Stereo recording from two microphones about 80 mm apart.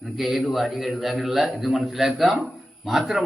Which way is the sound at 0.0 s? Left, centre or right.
Centre.